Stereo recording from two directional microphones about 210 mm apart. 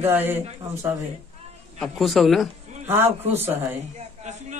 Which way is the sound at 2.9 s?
10° right (ahead or behind).